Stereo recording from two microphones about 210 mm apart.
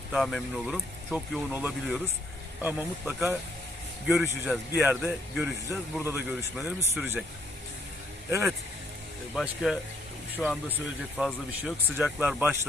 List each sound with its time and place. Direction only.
0.1 s speech: centre (ahead or behind)
8.3 s speech: 10° right (ahead or behind)
9.3 s speech: centre (ahead or behind)